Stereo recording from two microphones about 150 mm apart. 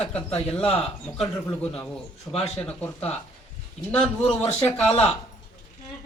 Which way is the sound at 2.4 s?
10° left (ahead or behind).